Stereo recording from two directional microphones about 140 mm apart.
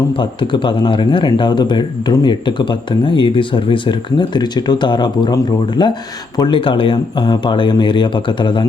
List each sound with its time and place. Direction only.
0.2 s speech: 35° left (ahead or behind)